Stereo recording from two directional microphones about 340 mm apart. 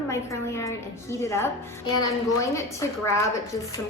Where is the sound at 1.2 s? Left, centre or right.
Centre.